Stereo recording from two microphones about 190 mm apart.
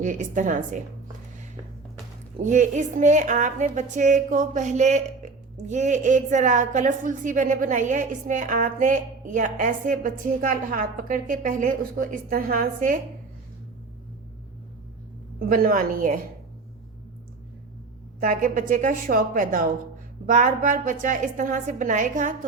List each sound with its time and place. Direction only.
0.0 s a woman's voice: 40° right (ahead or behind)
2.4 s a woman's voice: 40° right (ahead or behind)
15.4 s a woman's voice: 50° right (ahead or behind)
18.2 s a woman's voice: 45° right (ahead or behind)